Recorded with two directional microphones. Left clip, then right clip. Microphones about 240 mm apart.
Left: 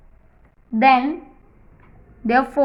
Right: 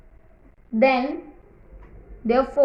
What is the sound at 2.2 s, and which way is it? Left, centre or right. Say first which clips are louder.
Speech: left 3 dB; centre.